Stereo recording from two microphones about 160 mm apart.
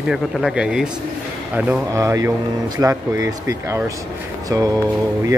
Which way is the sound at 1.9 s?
20° right (ahead or behind).